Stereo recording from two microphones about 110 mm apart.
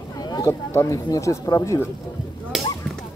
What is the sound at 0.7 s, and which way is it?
Speech, 25° left (ahead or behind).